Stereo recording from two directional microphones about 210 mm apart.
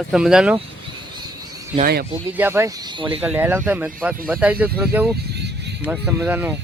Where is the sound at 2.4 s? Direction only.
10° right (ahead or behind).